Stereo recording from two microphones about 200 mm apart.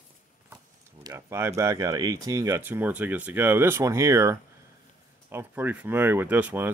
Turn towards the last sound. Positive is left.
turn(degrees=-10)  # may be behind; listen again after turning